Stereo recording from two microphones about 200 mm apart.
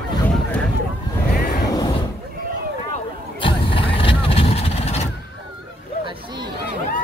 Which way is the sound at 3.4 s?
25° left (ahead or behind).